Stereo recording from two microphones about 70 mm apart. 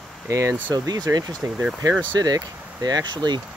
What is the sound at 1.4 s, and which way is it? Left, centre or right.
Speech, right.